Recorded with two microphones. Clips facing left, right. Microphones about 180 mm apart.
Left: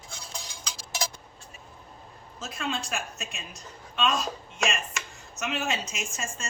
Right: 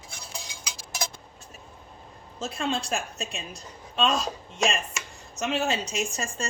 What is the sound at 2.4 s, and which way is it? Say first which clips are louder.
Speech: right 4 dB; 35° right (ahead or behind).